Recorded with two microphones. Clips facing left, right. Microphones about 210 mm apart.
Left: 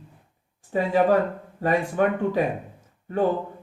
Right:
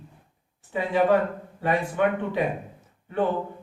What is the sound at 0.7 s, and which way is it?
Speech, 40° left (ahead or behind).